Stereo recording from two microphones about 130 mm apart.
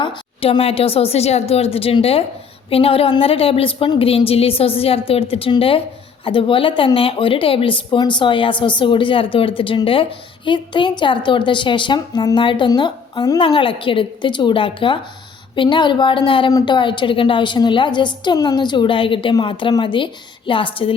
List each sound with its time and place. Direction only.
0.0 s a woman's voice: 40° left (ahead or behind)
13.4 s a woman's voice: 40° left (ahead or behind)